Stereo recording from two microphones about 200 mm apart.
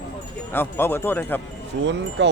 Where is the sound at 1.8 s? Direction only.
65° right (ahead or behind).